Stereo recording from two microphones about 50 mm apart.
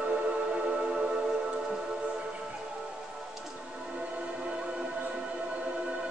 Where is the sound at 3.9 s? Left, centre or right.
Right.